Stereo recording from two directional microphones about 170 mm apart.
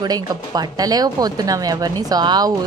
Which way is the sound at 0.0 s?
25° right (ahead or behind).